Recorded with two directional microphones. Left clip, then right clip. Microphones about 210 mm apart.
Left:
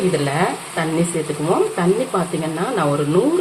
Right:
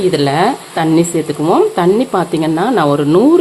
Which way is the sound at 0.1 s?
55° right (ahead or behind).